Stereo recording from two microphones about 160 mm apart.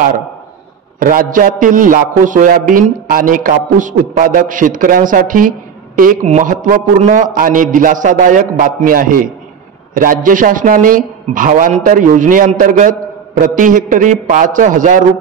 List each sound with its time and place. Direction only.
0.9 s a man's voice: 60° right (ahead or behind)